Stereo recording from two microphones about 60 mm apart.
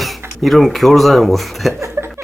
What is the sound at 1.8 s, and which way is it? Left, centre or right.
Chuckle, right.